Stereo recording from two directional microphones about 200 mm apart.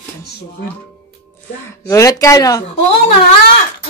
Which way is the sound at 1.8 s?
15° left (ahead or behind).